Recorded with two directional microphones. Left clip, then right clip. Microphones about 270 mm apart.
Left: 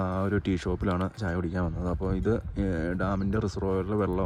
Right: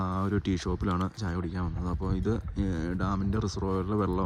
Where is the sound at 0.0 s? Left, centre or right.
Centre.